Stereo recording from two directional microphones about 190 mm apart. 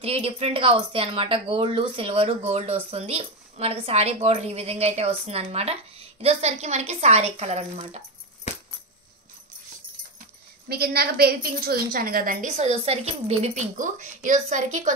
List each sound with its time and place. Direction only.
0.0 s speech: 30° right (ahead or behind)
10.7 s speech: 55° right (ahead or behind)